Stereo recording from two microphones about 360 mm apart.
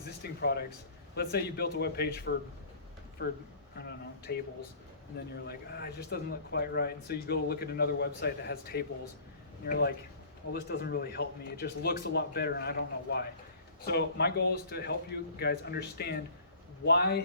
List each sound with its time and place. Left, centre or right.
0.2 s speech: left